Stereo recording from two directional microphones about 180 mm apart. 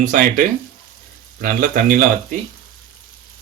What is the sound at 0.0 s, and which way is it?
Speech, 45° right (ahead or behind).